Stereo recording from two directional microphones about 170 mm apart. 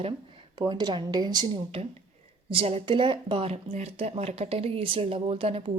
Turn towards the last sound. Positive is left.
turn(degrees=-35)  # may be behind; listen again after turning